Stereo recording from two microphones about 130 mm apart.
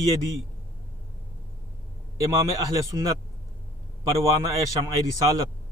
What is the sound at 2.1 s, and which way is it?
Speech, 25° right (ahead or behind).